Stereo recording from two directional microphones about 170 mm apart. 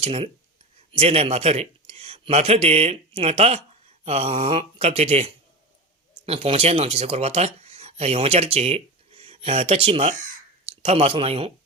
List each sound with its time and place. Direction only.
0.0 s speech: 35° right (ahead or behind)
10.2 s crow: 40° right (ahead or behind)